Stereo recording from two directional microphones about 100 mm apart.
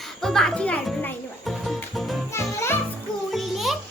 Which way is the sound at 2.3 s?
25° left (ahead or behind).